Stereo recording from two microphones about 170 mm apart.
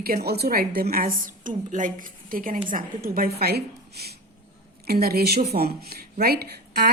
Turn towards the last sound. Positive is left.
turn(degrees=-65)  # may be behind; listen again after turning